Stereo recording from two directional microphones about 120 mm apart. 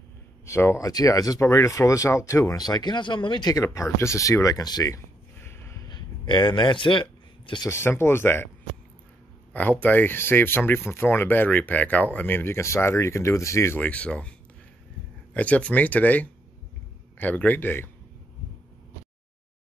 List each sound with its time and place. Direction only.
0.5 s speech: 20° left (ahead or behind)
5.4 s snort: 20° left (ahead or behind)
5.9 s a sound: 40° left (ahead or behind)
7.6 s speech: 20° left (ahead or behind)
9.5 s speech: 15° left (ahead or behind)
13.7 s speech: 10° left (ahead or behind)
15.3 s speech: 10° left (ahead or behind)